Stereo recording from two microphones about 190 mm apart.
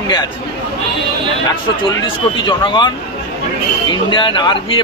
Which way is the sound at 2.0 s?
25° left (ahead or behind).